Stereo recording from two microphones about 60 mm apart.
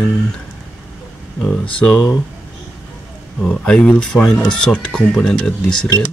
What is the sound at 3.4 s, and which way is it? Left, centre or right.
Speech, centre.